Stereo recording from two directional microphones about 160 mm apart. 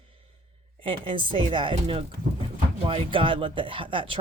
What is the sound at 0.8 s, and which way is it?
Speech, 30° right (ahead or behind).